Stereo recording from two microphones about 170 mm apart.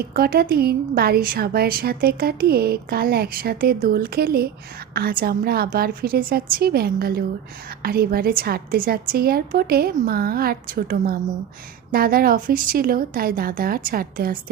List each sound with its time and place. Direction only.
0.0 s a woman's voice: 60° right (ahead or behind)